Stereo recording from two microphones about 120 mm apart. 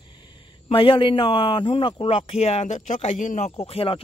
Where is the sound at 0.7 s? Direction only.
45° left (ahead or behind).